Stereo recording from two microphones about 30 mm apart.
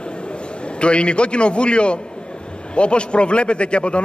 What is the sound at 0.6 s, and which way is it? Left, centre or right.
A man's voice, left.